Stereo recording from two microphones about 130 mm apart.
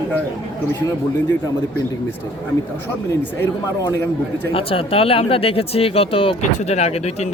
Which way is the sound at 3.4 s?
20° left (ahead or behind).